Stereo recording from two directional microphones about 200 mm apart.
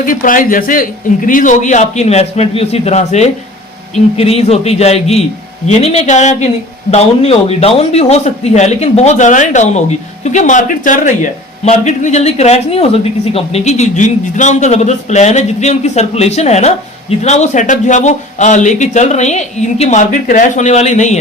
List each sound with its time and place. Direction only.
0.0 s a man's voice: 45° left (ahead or behind)